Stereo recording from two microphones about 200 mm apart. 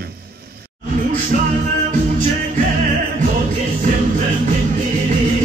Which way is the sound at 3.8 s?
35° right (ahead or behind).